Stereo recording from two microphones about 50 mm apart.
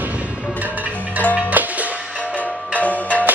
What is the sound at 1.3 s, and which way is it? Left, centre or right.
Music, right.